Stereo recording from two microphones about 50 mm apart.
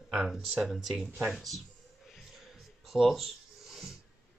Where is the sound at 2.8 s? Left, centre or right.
Centre.